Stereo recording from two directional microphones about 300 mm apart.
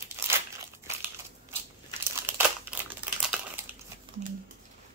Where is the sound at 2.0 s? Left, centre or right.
Centre.